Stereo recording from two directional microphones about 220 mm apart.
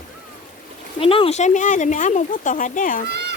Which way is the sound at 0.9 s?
25° left (ahead or behind).